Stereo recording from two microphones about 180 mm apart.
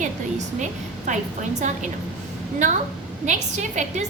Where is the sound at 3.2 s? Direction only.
40° right (ahead or behind).